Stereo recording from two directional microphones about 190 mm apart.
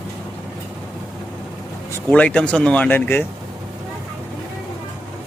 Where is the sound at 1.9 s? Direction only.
5° left (ahead or behind).